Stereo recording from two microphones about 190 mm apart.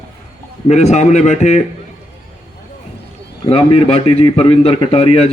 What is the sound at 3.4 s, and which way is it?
A man's voice, 30° left (ahead or behind).